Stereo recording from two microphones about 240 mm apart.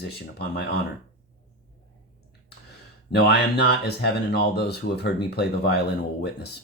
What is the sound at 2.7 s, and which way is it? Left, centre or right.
Speech, left.